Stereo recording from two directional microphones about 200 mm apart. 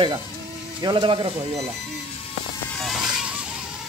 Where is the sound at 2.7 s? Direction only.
Centre (ahead or behind).